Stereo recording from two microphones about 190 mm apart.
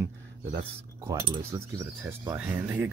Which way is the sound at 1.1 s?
20° right (ahead or behind).